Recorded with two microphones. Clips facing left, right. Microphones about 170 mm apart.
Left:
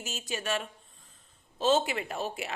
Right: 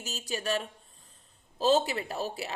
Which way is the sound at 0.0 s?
40° right (ahead or behind).